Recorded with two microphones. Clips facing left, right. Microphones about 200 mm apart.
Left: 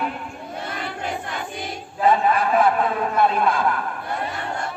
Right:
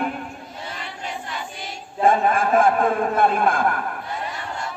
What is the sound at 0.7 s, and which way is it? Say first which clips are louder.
Crowd: left 4 dB; 55° left (ahead or behind).